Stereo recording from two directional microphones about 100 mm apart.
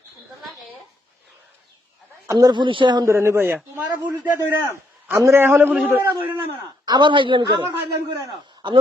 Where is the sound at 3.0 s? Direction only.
25° right (ahead or behind).